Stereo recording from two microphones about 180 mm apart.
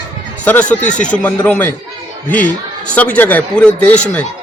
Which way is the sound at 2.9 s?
10° left (ahead or behind).